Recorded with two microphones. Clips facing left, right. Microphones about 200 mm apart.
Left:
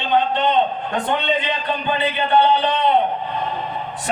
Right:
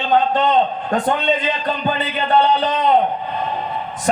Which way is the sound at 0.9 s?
40° right (ahead or behind).